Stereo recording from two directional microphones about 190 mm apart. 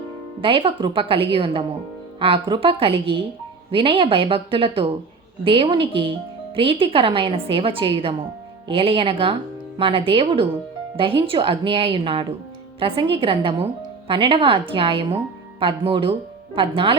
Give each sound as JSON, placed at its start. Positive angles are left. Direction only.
{"t": 0.4, "sound": "a woman's voice", "side_deg": -25}